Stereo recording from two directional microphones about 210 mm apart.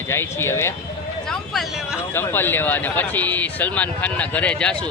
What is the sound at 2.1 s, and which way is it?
Speech, 10° left (ahead or behind).